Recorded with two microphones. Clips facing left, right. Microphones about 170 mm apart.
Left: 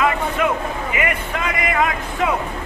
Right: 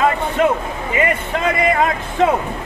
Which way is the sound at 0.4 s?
30° right (ahead or behind).